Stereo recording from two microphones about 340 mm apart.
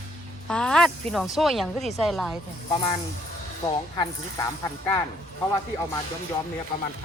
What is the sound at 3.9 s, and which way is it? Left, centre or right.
Speech, centre.